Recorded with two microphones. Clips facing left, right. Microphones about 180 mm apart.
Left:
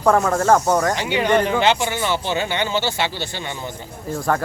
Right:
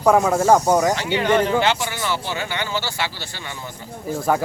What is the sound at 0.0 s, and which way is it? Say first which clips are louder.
Speech: right 1 dB; 10° right (ahead or behind).